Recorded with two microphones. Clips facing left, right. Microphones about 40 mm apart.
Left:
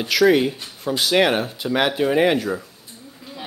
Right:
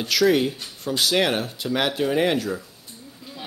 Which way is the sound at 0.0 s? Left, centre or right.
Centre.